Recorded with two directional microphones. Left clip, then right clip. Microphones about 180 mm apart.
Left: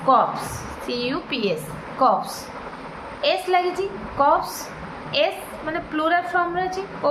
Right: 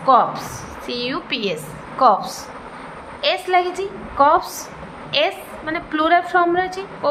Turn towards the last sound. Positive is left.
turn(degrees=-55)  # may be behind; listen again after turning